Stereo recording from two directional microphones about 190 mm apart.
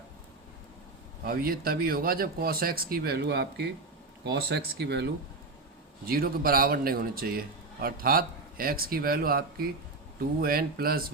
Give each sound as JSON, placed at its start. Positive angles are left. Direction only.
{"t": 1.2, "sound": "a man's voice", "side_deg": -50}
{"t": 6.1, "sound": "a man's voice", "side_deg": -50}